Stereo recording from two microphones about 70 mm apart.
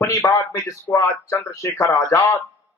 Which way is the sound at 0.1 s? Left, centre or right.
Left.